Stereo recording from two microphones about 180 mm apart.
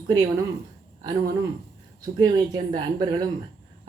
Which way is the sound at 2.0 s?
20° right (ahead or behind).